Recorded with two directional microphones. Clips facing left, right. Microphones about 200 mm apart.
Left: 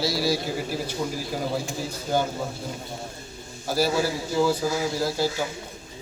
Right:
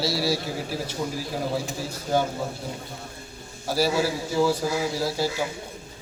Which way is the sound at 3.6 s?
5° right (ahead or behind).